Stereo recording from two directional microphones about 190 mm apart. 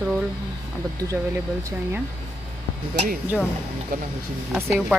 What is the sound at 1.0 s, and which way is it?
Speech, 15° right (ahead or behind).